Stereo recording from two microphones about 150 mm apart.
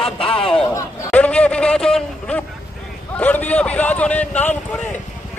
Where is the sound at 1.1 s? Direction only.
10° left (ahead or behind).